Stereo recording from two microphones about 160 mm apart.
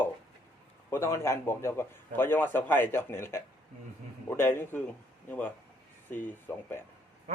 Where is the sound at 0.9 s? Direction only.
15° left (ahead or behind).